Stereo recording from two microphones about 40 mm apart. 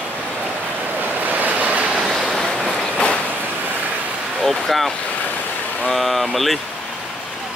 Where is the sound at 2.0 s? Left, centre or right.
Centre.